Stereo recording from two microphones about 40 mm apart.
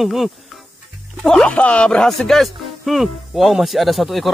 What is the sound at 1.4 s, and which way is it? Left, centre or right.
Speech, left.